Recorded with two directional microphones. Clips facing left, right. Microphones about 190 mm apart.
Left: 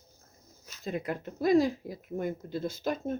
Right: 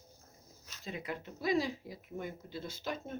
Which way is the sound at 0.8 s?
50° left (ahead or behind).